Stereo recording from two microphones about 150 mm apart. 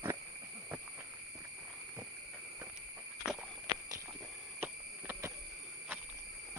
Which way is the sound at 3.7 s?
25° right (ahead or behind).